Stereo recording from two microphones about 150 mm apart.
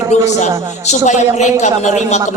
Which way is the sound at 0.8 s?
50° left (ahead or behind).